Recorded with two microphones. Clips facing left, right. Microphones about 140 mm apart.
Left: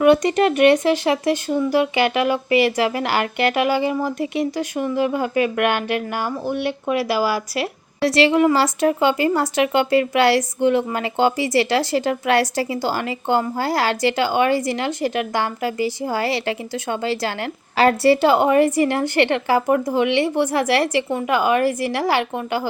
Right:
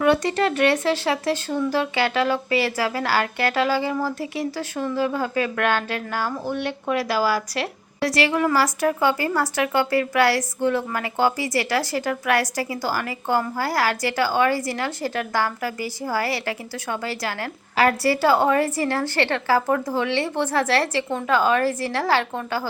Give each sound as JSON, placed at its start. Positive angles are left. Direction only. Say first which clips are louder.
{"t": 0.0, "sound": "speech", "louder": "left 5 dB", "side_deg": 20}
{"t": 8.0, "sound": "a woman's voice", "louder": "left 6 dB", "side_deg": 25}